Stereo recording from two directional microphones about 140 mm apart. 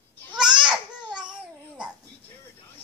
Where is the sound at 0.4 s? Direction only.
5° right (ahead or behind).